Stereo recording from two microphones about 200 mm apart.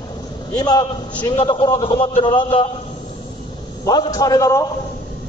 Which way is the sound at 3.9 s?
15° left (ahead or behind).